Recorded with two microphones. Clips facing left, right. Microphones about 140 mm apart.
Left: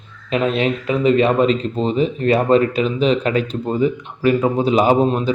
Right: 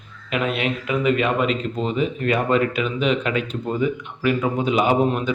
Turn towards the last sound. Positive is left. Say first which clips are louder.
# left 4 dB
turn(degrees=30)  # may be behind; listen again after turning